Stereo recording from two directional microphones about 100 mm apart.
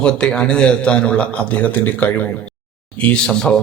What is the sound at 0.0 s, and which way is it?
A man's voice, 10° left (ahead or behind).